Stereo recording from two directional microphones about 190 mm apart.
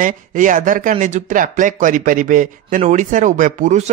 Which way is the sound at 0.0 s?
45° right (ahead or behind).